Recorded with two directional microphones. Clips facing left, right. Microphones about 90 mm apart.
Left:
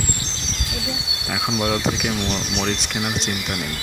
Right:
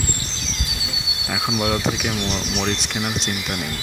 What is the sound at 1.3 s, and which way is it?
Speech, 5° right (ahead or behind).